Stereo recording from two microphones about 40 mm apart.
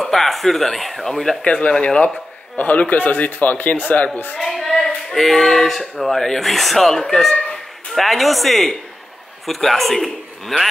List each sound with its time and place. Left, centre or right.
0.0 s speech: centre
1.4 s speech: left
2.5 s a man's voice: left
4.4 s speech: centre